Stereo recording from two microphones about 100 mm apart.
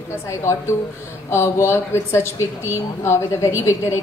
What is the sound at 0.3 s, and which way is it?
A woman's voice, 30° left (ahead or behind).